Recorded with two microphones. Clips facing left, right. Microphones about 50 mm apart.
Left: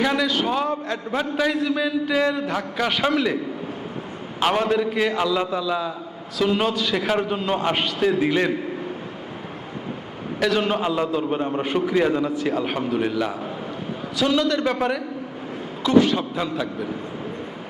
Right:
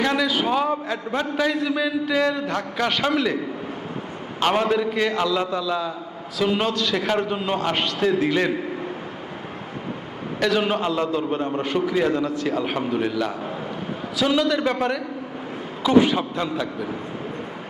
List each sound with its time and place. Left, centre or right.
0.0 s a sound: centre
0.3 s a man's voice: centre
4.5 s a man's voice: centre
6.4 s a man's voice: centre
10.4 s a man's voice: centre
10.8 s a man's voice: centre
14.2 s a man's voice: centre
15.9 s a man's voice: centre
16.3 s a man's voice: centre